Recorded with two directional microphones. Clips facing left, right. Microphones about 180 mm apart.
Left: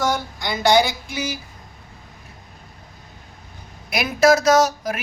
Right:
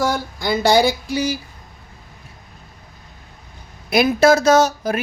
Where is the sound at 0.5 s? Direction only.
35° right (ahead or behind).